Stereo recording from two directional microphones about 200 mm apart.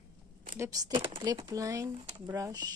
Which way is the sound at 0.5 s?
15° right (ahead or behind).